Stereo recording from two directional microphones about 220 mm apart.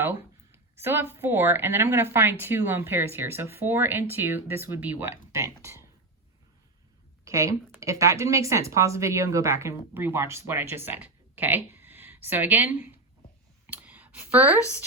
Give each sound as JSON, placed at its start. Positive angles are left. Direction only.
{"t": 0.0, "sound": "a woman's voice", "side_deg": -10}
{"t": 7.3, "sound": "a woman's voice", "side_deg": -15}